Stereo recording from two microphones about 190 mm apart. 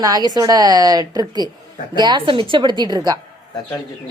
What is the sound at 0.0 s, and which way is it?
Speech, 20° right (ahead or behind).